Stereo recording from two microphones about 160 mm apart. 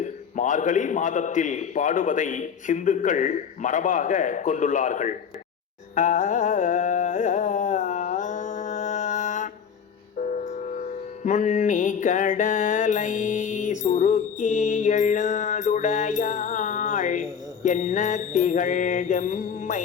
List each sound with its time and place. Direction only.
0.0 s a man's voice: 50° left (ahead or behind)
5.9 s carnatic music: 50° left (ahead or behind)
10.2 s music: 50° left (ahead or behind)